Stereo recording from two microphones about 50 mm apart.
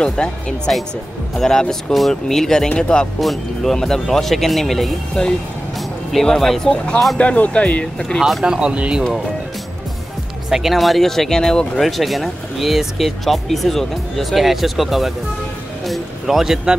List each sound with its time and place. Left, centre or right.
0.0 s speech: centre
3.2 s speech: centre
5.2 s speech: left
7.2 s speech: left
8.2 s speech: centre
8.5 s speech: centre
10.5 s speech: centre
11.8 s speech: centre
15.8 s a sound: centre